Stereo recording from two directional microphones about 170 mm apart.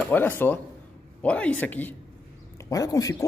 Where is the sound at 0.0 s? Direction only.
10° left (ahead or behind).